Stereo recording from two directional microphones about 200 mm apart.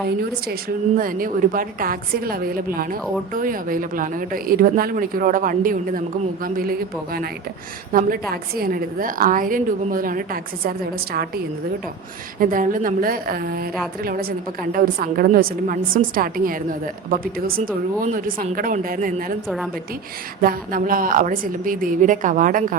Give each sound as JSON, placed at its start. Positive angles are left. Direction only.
{"t": 0.9, "sound": "a woman's voice", "side_deg": -45}
{"t": 20.4, "sound": "a woman's voice", "side_deg": -45}